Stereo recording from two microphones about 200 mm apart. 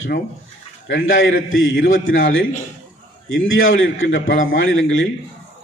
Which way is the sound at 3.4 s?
80° left.